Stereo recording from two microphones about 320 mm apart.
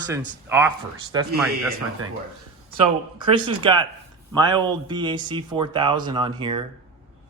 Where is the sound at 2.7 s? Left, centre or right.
Centre.